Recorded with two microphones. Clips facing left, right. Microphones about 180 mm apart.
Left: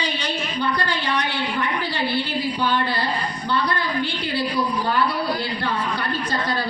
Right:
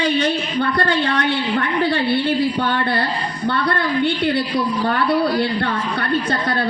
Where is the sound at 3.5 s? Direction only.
60° right (ahead or behind).